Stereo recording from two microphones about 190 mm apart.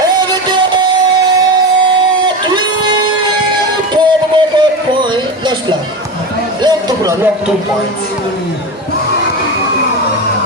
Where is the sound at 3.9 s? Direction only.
25° right (ahead or behind).